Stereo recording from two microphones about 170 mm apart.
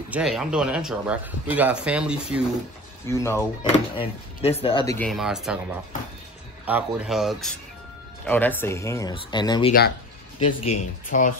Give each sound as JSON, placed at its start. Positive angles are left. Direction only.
{"t": 0.1, "sound": "a man's voice", "side_deg": -5}
{"t": 3.1, "sound": "speech", "side_deg": 15}
{"t": 3.9, "sound": "speech", "side_deg": 35}
{"t": 5.0, "sound": "a man's voice", "side_deg": 0}
{"t": 8.3, "sound": "speech", "side_deg": 10}
{"t": 9.7, "sound": "speech", "side_deg": 65}
{"t": 10.4, "sound": "speech", "side_deg": 35}
{"t": 11.1, "sound": "speech", "side_deg": 50}